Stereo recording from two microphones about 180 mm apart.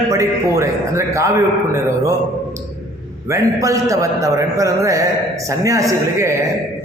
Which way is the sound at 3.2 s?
15° right (ahead or behind).